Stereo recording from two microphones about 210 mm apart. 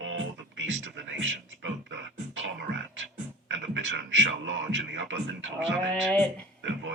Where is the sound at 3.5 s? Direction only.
65° right (ahead or behind).